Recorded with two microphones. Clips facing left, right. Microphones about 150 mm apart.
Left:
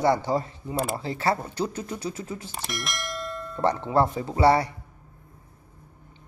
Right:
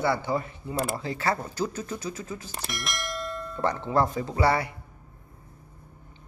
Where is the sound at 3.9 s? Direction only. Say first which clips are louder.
Even; 25° left (ahead or behind).